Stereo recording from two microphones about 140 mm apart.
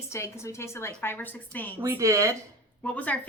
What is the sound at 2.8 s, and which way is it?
Speech, 10° left (ahead or behind).